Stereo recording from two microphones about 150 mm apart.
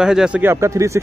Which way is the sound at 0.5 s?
20° right (ahead or behind).